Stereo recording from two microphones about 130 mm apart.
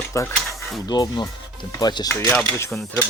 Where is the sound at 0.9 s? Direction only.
35° left (ahead or behind).